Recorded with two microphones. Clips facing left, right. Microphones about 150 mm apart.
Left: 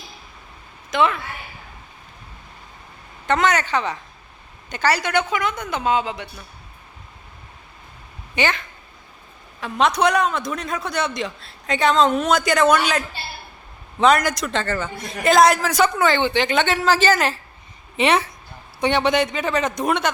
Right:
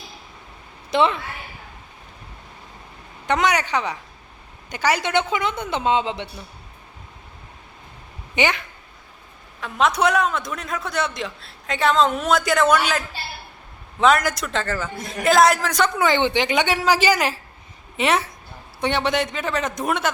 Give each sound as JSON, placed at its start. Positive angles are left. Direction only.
{"t": 0.9, "sound": "a woman's voice", "side_deg": -30}
{"t": 3.2, "sound": "a woman's voice", "side_deg": -15}
{"t": 8.4, "sound": "speech", "side_deg": -15}
{"t": 9.6, "sound": "a man's voice", "side_deg": 0}
{"t": 16.0, "sound": "a man's voice", "side_deg": -15}